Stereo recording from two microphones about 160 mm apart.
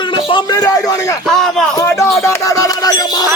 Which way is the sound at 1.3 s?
Centre (ahead or behind).